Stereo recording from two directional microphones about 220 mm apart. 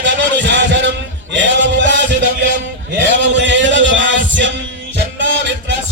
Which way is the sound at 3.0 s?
55° right (ahead or behind).